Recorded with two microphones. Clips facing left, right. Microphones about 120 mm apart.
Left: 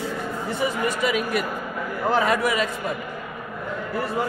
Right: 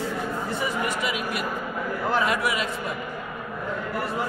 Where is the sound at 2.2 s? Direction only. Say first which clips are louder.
Left 3 dB; 40° left (ahead or behind).